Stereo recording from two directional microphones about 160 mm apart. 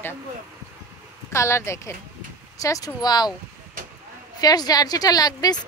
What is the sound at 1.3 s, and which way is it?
Speech, 15° left (ahead or behind).